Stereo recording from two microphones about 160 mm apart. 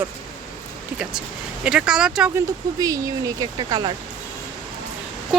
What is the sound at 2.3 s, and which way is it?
Speech, 20° right (ahead or behind).